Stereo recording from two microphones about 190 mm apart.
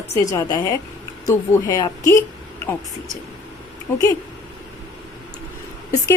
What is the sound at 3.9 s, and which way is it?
Speech, 10° left (ahead or behind).